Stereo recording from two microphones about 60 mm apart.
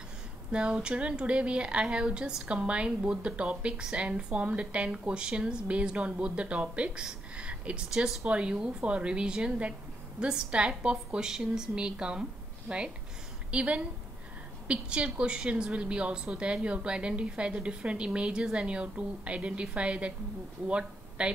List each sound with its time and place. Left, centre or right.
0.5 s a woman's voice: centre